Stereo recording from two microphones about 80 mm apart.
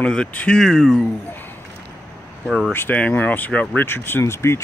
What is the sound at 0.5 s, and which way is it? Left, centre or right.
Speech, centre.